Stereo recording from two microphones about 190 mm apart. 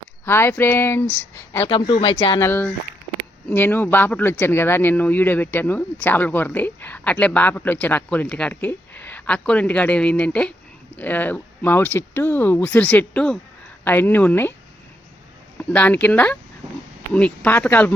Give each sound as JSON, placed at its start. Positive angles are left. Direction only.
{"t": 0.3, "sound": "speech", "side_deg": 10}
{"t": 1.7, "sound": "speech", "side_deg": 30}
{"t": 2.5, "sound": "speech", "side_deg": 10}
{"t": 15.5, "sound": "speech", "side_deg": 10}